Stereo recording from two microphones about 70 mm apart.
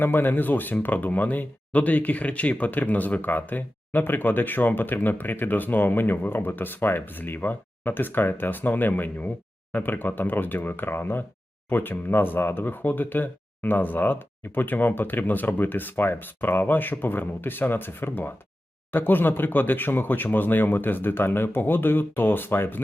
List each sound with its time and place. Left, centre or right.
0.0 s speech: left